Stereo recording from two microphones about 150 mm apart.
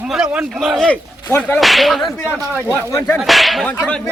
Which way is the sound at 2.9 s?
15° left (ahead or behind).